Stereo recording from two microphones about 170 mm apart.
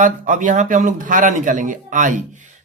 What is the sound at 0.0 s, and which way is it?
Speech, 50° right (ahead or behind).